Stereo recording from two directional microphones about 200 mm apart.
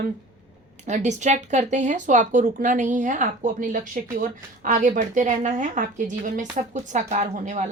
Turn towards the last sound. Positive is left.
turn(degrees=-40)  # may be behind; listen again after turning